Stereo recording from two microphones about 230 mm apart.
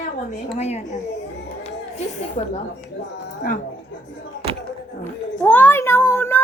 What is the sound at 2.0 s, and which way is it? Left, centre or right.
Speech, left.